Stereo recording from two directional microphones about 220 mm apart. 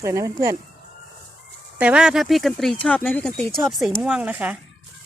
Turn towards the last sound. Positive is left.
turn(degrees=-5)  # may be behind; listen again after turning